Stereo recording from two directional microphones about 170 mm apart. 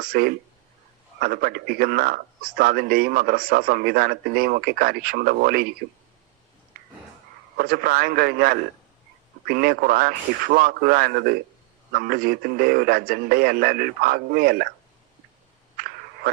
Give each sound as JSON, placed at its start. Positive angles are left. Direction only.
{"t": 0.0, "sound": "speech", "side_deg": -60}
{"t": 7.5, "sound": "speech", "side_deg": -60}